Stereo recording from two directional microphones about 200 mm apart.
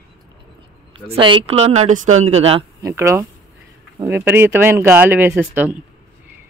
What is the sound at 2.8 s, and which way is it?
Speech, 15° right (ahead or behind).